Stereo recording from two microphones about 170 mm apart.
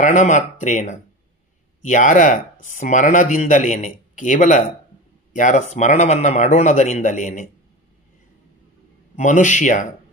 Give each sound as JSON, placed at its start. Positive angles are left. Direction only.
{"t": 0.0, "sound": "speech", "side_deg": 45}
{"t": 9.1, "sound": "speech", "side_deg": 45}